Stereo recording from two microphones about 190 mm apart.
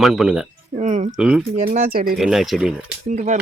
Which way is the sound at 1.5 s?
40° right (ahead or behind).